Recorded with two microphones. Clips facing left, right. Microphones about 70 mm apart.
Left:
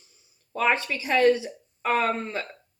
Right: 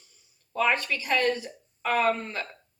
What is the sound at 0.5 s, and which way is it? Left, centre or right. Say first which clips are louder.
Speech: left 1 dB; left.